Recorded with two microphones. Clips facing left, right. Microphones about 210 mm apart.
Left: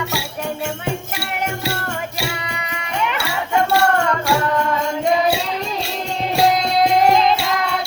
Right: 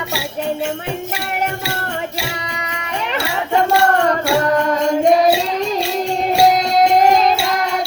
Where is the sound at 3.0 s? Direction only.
35° right (ahead or behind).